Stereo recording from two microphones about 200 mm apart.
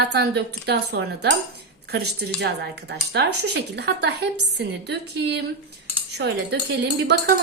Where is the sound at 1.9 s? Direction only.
55° right (ahead or behind).